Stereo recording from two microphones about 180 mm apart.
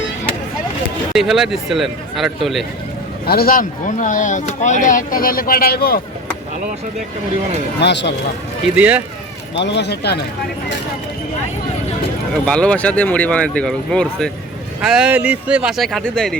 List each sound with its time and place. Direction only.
1.1 s speech: centre (ahead or behind)
3.2 s speech: 55° left (ahead or behind)
7.8 s speech: 70° left (ahead or behind)
8.7 s speech: 10° right (ahead or behind)
9.6 s speech: 70° left (ahead or behind)
12.5 s speech: 5° left (ahead or behind)